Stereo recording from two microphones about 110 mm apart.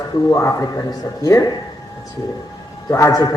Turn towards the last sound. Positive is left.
turn(degrees=30)  # may be behind; listen again after turning